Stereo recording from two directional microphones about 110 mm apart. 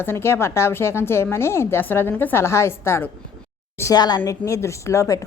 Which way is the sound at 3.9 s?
40° left (ahead or behind).